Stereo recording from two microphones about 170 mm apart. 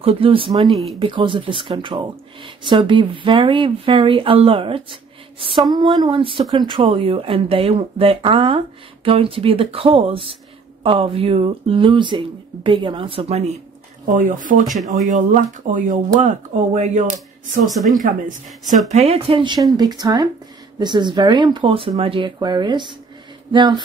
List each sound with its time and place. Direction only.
0.0 s speech: 35° right (ahead or behind)
0.7 s speech: centre (ahead or behind)
0.9 s speech: 30° right (ahead or behind)
14.0 s speech: 50° right (ahead or behind)
17.6 s speech: centre (ahead or behind)
18.9 s speech: 40° right (ahead or behind)